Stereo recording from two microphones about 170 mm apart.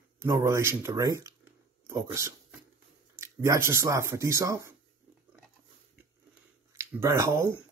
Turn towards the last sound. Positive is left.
turn(degrees=-15)  # may be behind; listen again after turning